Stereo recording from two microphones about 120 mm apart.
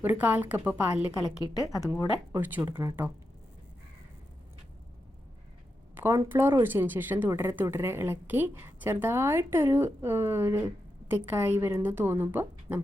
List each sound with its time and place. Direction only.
0.0 s a woman's voice: 15° right (ahead or behind)
1.5 s a woman's voice: 25° left (ahead or behind)
2.4 s a woman's voice: 15° right (ahead or behind)
5.9 s a sound: 15° right (ahead or behind)
6.2 s a woman's voice: 20° right (ahead or behind)